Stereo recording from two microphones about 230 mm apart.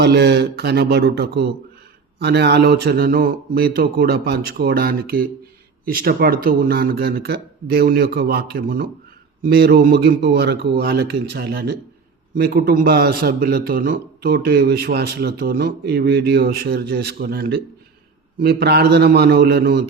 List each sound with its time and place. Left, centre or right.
0.0 s a man's voice: right